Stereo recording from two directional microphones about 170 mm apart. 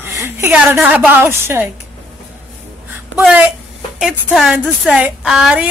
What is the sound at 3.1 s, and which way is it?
A woman's voice, 5° right (ahead or behind).